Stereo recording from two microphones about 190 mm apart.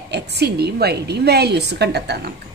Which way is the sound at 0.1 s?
60° right (ahead or behind).